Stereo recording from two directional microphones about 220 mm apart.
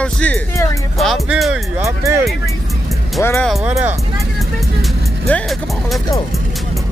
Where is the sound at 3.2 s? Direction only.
10° left (ahead or behind).